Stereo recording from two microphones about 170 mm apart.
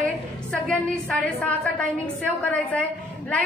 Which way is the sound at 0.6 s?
5° left (ahead or behind).